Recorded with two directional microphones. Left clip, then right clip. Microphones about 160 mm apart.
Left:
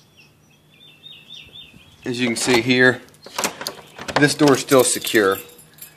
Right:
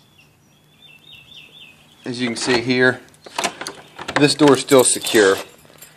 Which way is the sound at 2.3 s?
25° left (ahead or behind).